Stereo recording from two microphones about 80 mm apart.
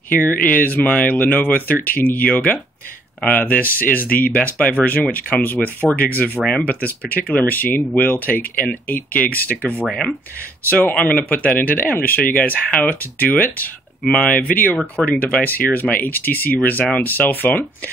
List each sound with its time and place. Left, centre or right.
0.2 s speech: left
10.7 s speech: left